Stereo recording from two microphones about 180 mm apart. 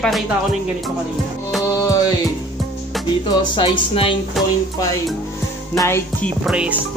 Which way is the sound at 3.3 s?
25° left (ahead or behind).